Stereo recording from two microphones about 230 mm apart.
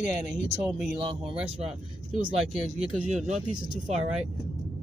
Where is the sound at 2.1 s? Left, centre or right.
Right.